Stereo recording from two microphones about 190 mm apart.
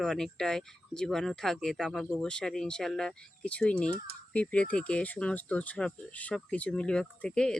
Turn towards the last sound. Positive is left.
turn(degrees=5)  # may be behind; listen again after turning